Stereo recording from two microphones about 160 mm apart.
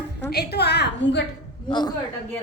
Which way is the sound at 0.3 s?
90° left.